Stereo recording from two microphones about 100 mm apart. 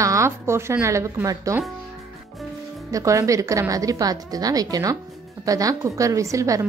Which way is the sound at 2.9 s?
35° right (ahead or behind).